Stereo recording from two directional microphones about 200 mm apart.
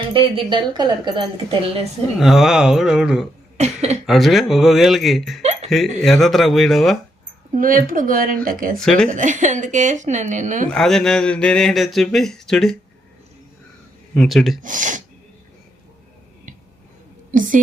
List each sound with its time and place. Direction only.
0.1 s a woman's voice: 25° right (ahead or behind)
2.1 s speech: centre (ahead or behind)
3.6 s speech: 35° right (ahead or behind)
4.0 s speech: centre (ahead or behind)
5.4 s a sound: 35° right (ahead or behind)
6.0 s speech: centre (ahead or behind)
7.5 s speech: 45° right (ahead or behind)
8.8 s speech: 5° left (ahead or behind)
9.0 s speech: 40° right (ahead or behind)
10.7 s speech: centre (ahead or behind)
14.1 s speech: centre (ahead or behind)
14.6 s speech: 40° right (ahead or behind)